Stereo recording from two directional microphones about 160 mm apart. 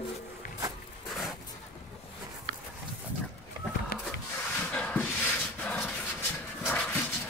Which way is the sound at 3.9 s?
75° left (ahead or behind).